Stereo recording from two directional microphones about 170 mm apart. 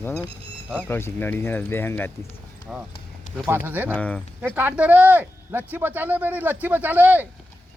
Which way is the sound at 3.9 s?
5° left (ahead or behind).